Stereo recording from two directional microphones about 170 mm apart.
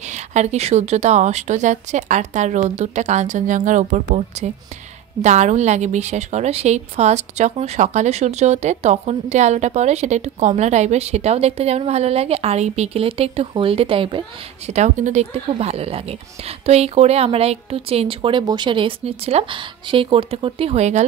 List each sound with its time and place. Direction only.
0.1 s a woman's voice: 45° right (ahead or behind)
14.7 s a woman's voice: 40° right (ahead or behind)